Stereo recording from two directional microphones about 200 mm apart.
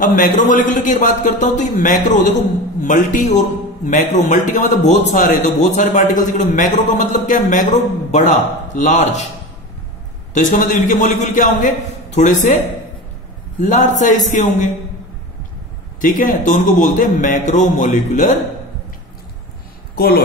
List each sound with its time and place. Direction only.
0.0 s a man's voice: 40° left (ahead or behind)
10.3 s a man's voice: 40° left (ahead or behind)
13.6 s a man's voice: 40° left (ahead or behind)
16.0 s a man's voice: 40° left (ahead or behind)